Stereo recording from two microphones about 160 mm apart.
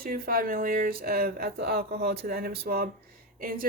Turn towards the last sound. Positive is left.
turn(degrees=-65)  # may be behind; listen again after turning